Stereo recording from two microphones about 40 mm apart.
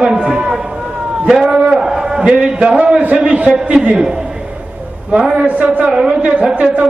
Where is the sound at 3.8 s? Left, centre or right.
Right.